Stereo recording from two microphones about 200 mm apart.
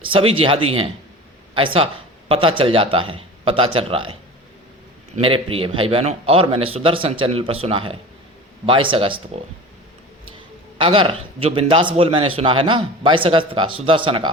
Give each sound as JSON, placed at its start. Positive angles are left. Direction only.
{"t": 0.1, "sound": "a man's voice", "side_deg": -25}
{"t": 5.2, "sound": "a man's voice", "side_deg": -30}
{"t": 10.8, "sound": "a man's voice", "side_deg": -25}